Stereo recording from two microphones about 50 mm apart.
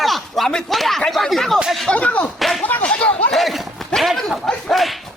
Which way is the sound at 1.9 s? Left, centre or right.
Left.